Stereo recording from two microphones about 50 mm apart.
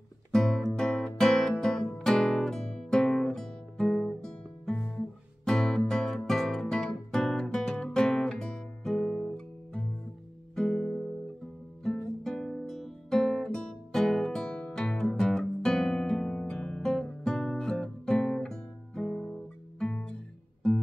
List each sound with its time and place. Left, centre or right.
0.3 s music: centre
4.9 s guitar: centre
10.5 s music: centre